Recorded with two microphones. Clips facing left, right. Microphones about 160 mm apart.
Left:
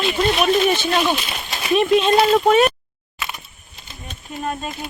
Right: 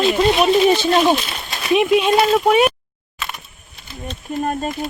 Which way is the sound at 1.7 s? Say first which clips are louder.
Right 1 dB; 10° right (ahead or behind).